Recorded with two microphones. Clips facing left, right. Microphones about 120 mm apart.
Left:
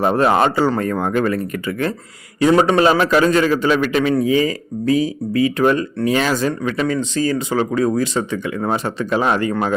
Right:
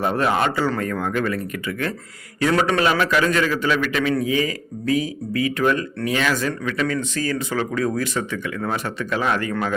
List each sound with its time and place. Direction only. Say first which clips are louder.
0.0 s speech: left 5 dB; 35° left (ahead or behind)
2.4 s speech: left 6 dB; 25° left (ahead or behind)